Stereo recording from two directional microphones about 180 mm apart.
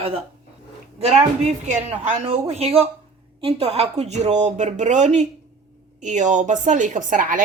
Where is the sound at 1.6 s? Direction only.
40° right (ahead or behind).